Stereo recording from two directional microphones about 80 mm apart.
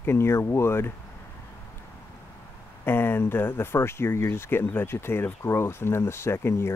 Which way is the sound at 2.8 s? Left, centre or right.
Left.